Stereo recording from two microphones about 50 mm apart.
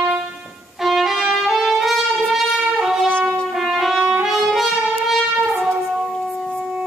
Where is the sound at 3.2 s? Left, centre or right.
Centre.